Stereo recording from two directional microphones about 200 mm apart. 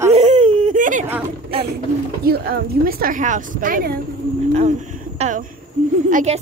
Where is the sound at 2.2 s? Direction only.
50° right (ahead or behind).